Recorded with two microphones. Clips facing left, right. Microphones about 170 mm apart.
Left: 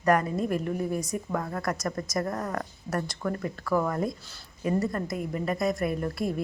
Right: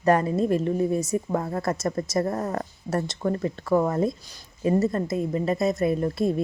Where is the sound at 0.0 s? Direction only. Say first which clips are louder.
Right 4 dB; 30° right (ahead or behind).